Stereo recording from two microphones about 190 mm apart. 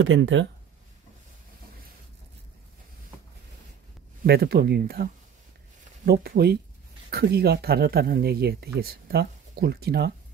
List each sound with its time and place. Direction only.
0.0 s speech: 85° right
4.2 s speech: 55° right (ahead or behind)